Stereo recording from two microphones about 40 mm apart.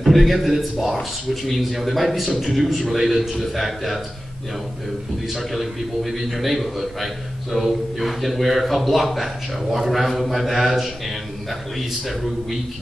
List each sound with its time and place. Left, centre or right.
0.0 s speech: centre
5.5 s speech: centre